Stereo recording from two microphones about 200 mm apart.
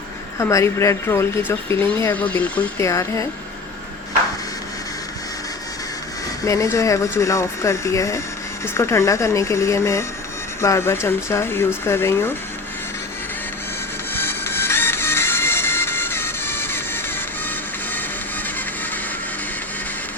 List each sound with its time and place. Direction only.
0.3 s speech: 15° left (ahead or behind)
6.4 s speech: 15° left (ahead or behind)
14.1 s music: 10° left (ahead or behind)